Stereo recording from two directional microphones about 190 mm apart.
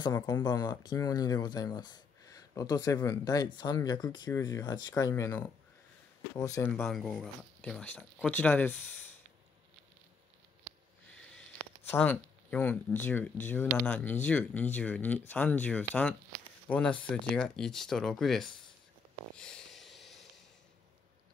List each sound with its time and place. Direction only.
0.0 s speech: 20° left (ahead or behind)
6.8 s speech: centre (ahead or behind)
11.1 s a sound: 5° left (ahead or behind)
11.9 s speech: 10° left (ahead or behind)
19.3 s snort: 5° left (ahead or behind)